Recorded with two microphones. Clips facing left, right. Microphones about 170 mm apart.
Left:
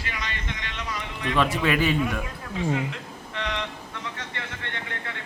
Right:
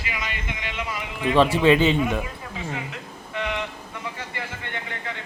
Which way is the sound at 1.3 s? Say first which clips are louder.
Right 6 dB; 30° right (ahead or behind).